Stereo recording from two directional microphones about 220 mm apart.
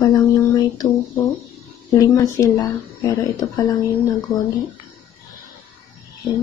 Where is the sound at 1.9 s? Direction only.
15° left (ahead or behind).